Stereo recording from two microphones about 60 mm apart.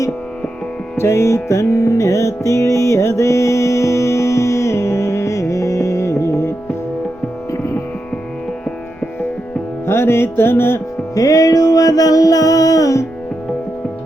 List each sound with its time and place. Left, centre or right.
0.9 s music: left
9.8 s music: left
11.1 s music: left